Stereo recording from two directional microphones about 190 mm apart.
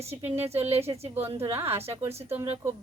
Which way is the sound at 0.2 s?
10° right (ahead or behind).